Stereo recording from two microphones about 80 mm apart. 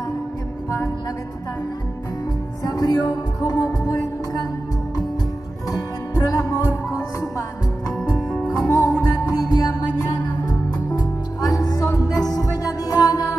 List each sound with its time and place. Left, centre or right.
2.6 s music: left
5.7 s music: left
8.0 s music: centre
8.5 s music: left